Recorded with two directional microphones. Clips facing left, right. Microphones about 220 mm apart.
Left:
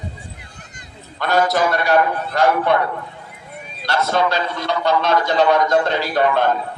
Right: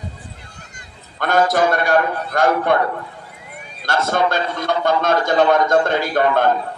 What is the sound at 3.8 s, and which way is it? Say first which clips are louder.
A man's voice: even; 50° right (ahead or behind).